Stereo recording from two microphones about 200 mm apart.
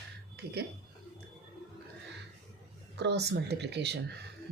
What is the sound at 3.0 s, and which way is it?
Speech, 55° right (ahead or behind).